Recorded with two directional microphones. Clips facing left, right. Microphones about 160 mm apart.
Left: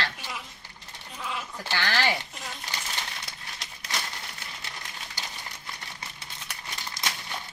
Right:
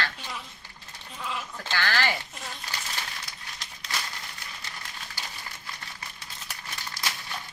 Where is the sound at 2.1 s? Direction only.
Centre (ahead or behind).